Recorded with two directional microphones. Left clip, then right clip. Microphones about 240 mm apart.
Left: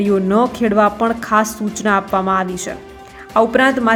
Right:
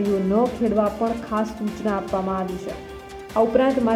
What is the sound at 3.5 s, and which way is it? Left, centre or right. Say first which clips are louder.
Speech: left 5 dB; centre.